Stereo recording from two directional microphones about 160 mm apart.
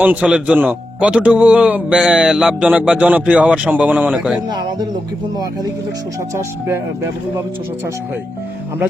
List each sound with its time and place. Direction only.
0.0 s speech: 10° right (ahead or behind)
4.4 s speech: 25° right (ahead or behind)
6.3 s speech: 15° right (ahead or behind)